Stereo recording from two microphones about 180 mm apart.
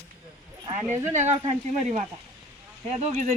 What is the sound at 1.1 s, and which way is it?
Speech, 40° right (ahead or behind).